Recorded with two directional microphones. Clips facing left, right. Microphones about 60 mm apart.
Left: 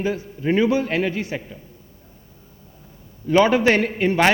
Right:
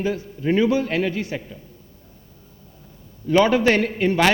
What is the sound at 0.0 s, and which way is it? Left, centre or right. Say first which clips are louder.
A man's voice: even; left.